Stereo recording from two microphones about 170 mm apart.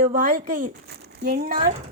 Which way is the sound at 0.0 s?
55° right (ahead or behind).